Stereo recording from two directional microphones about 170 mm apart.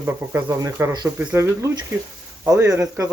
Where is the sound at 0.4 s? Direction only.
20° right (ahead or behind).